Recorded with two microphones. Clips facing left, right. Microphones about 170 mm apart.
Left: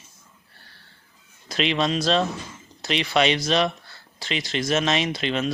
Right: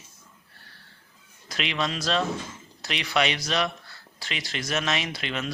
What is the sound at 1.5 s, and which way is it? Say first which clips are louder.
Speech: left 6 dB; 30° left (ahead or behind).